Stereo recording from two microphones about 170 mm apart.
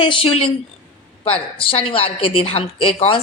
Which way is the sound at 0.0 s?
30° left (ahead or behind).